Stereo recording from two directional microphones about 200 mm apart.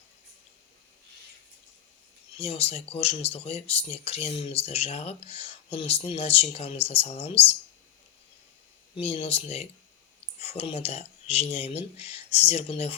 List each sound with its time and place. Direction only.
2.4 s speech: 30° left (ahead or behind)
9.0 s speech: 30° left (ahead or behind)